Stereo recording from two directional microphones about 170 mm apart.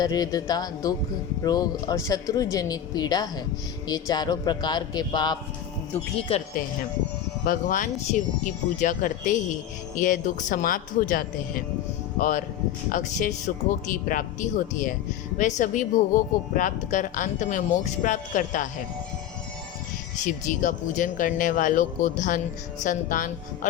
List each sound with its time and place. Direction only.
0.0 s speech: 25° left (ahead or behind)
6.3 s speech: 35° left (ahead or behind)
7.4 s speech: 50° left (ahead or behind)
15.4 s speech: 45° left (ahead or behind)
20.2 s speech: 50° left (ahead or behind)